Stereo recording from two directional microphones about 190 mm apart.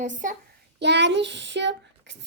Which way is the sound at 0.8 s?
65° right (ahead or behind).